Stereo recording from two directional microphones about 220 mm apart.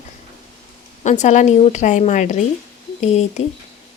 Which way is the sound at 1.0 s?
35° left (ahead or behind).